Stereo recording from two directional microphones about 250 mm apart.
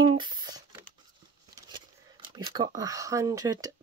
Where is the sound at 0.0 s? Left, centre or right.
Centre.